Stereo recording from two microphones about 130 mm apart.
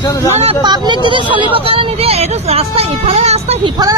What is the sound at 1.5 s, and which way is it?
Vehicle, 45° right (ahead or behind).